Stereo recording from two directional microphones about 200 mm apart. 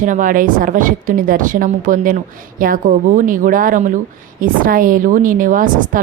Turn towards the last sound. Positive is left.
turn(degrees=-45)  # may be behind; listen again after turning